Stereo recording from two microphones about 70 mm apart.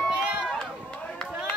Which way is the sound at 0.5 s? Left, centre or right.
Centre.